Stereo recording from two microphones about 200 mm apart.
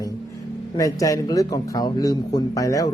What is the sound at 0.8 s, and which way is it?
A man's voice, 15° left (ahead or behind).